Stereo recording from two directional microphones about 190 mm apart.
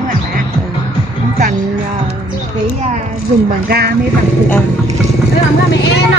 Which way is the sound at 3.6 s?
55° right (ahead or behind).